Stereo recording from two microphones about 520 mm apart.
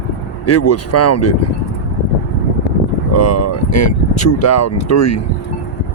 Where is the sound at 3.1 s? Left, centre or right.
Left.